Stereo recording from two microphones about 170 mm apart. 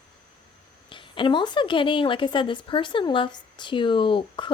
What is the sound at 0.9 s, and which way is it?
A woman's voice, 30° left (ahead or behind).